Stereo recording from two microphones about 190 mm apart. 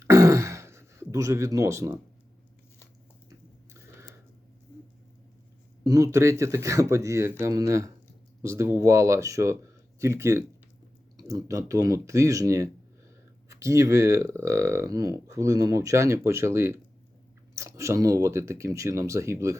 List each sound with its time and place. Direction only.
0.0 s throat clearing: 15° right (ahead or behind)
5.8 s speech: 15° right (ahead or behind)